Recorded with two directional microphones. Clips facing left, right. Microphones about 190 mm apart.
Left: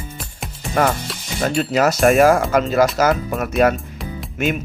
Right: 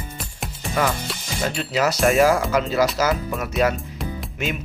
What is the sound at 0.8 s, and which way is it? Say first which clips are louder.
Speech: left 4 dB; 50° left (ahead or behind).